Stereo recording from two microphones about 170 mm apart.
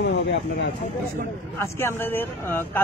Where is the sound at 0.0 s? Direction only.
90° left.